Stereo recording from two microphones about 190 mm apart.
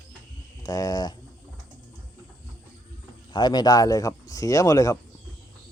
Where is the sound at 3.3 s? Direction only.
20° left (ahead or behind).